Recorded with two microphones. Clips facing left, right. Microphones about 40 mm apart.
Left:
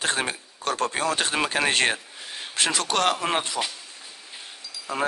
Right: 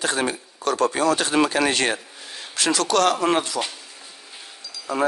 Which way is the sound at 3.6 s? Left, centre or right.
Centre.